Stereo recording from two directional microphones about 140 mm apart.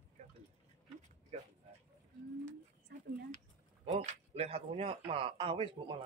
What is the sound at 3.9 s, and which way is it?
Speech, 55° right (ahead or behind).